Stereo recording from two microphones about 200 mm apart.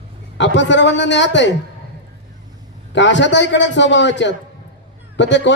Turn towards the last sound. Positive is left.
turn(degrees=65)  # may be behind; listen again after turning